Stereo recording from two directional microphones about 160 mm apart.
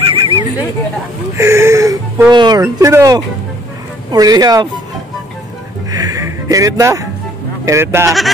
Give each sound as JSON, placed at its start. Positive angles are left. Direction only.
{"t": 0.0, "sound": "a sound", "side_deg": -35}
{"t": 1.3, "sound": "speech", "side_deg": -15}
{"t": 5.9, "sound": "music", "side_deg": -25}
{"t": 7.6, "sound": "speech", "side_deg": -15}